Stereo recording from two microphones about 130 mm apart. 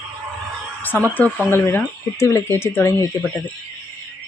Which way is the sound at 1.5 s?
20° left (ahead or behind).